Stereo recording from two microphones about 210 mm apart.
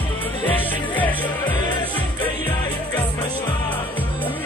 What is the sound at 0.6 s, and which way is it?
Music, 10° left (ahead or behind).